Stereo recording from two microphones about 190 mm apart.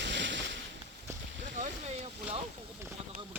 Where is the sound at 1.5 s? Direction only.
35° right (ahead or behind).